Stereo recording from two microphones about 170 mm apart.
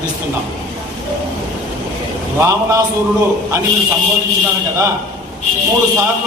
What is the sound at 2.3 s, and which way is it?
Speech, 20° right (ahead or behind).